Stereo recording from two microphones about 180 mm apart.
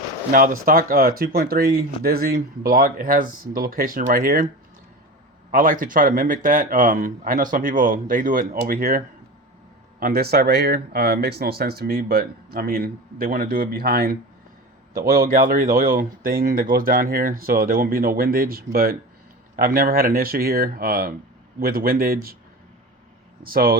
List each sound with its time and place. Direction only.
0.3 s speech: 50° right (ahead or behind)
5.5 s speech: 50° right (ahead or behind)
23.4 s speech: 55° right (ahead or behind)